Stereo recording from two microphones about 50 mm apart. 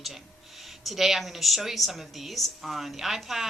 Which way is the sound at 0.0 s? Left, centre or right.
Centre.